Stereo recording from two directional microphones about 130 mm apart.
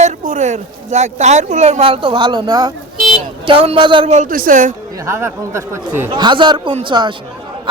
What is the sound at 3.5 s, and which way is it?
Speech, 45° right (ahead or behind).